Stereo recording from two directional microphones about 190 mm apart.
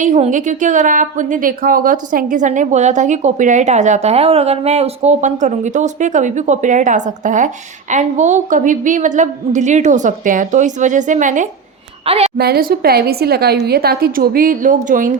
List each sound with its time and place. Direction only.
0.0 s a woman's voice: 40° right (ahead or behind)
12.4 s a woman's voice: 55° right (ahead or behind)